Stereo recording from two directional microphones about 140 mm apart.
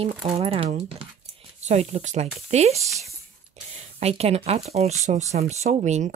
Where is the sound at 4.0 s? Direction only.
50° right (ahead or behind).